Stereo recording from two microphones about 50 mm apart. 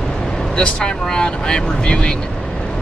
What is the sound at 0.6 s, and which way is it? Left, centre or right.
Speech, centre.